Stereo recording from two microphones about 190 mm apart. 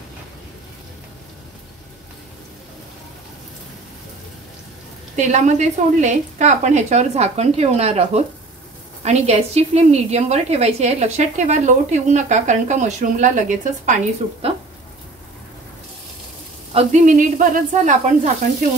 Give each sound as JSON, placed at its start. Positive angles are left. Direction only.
{"t": 5.1, "sound": "a woman's voice", "side_deg": -40}
{"t": 16.7, "sound": "a woman's voice", "side_deg": -40}